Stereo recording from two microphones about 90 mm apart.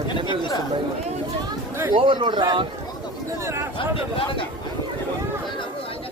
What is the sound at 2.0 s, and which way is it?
Speech, 65° right (ahead or behind).